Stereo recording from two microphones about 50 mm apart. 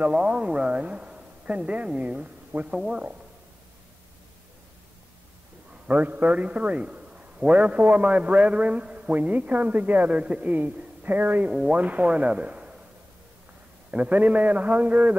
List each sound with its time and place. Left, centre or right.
0.0 s a man's voice: right
2.5 s a man's voice: right
2.9 s a man's voice: right
5.9 s a man's voice: right
7.4 s a man's voice: right
11.5 s a man's voice: right
13.8 s a man's voice: right